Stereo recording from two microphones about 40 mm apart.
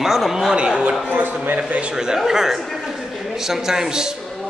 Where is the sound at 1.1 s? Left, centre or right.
Right.